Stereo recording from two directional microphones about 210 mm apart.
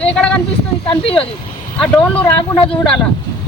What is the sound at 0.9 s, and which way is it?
Speech, 25° left (ahead or behind).